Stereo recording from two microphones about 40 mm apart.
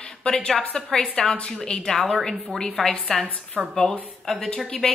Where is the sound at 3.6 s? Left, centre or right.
Right.